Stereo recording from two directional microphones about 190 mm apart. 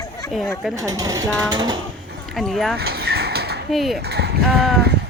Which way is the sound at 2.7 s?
55° right (ahead or behind).